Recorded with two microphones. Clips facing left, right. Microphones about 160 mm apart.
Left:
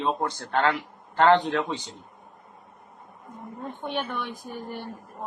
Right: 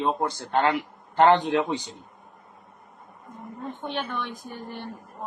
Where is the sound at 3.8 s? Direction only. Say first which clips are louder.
Left 1 dB; 10° left (ahead or behind).